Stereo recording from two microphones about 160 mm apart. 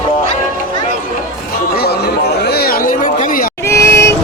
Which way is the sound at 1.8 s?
80° left.